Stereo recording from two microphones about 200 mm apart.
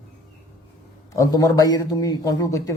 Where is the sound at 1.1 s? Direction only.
15° left (ahead or behind).